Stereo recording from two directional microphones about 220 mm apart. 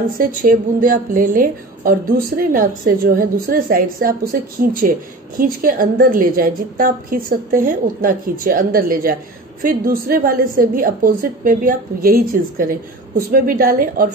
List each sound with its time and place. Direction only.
0.2 s a woman's voice: 40° right (ahead or behind)